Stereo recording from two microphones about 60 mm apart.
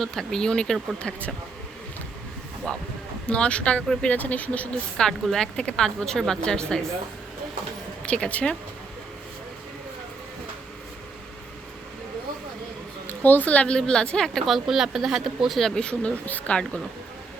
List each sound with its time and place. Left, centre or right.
0.0 s a woman's voice: centre
2.7 s a woman's voice: centre
4.9 s a woman's voice: centre
8.0 s speech: centre
13.1 s a woman's voice: left; by 14.4 s centre
14.4 s speech: centre; by 16.6 s left